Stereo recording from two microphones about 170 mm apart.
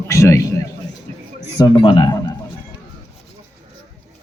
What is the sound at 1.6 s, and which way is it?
Speech, 25° left (ahead or behind).